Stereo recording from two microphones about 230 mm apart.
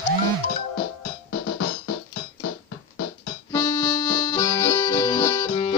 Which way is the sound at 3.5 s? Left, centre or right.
Centre.